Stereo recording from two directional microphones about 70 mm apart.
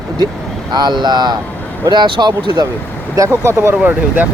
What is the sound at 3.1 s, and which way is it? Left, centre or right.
Speech, right.